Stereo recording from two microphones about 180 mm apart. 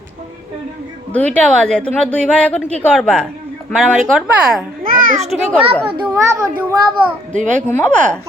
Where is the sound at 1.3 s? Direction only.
5° left (ahead or behind).